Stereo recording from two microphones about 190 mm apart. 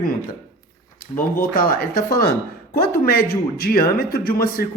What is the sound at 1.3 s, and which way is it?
Speech, 50° left (ahead or behind).